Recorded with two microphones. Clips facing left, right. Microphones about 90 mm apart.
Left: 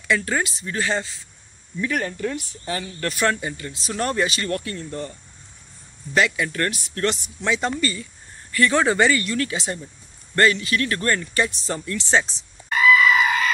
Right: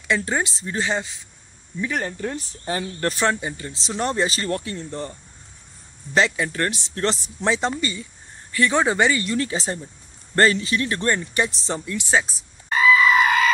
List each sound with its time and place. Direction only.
0.1 s speech: 20° right (ahead or behind)
2.3 s speech: 35° right (ahead or behind)
6.1 s speech: 30° right (ahead or behind)
7.7 s speech: 20° right (ahead or behind)
12.7 s goat: 15° right (ahead or behind)